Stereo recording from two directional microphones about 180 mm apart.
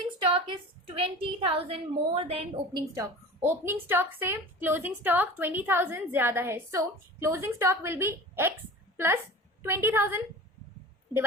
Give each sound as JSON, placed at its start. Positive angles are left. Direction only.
{"t": 0.2, "sound": "a woman's voice", "side_deg": -30}
{"t": 2.9, "sound": "a woman's voice", "side_deg": -15}
{"t": 9.6, "sound": "a woman's voice", "side_deg": -15}